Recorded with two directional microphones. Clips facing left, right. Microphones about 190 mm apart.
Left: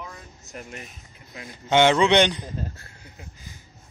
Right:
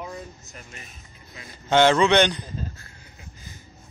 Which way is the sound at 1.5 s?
15° left (ahead or behind).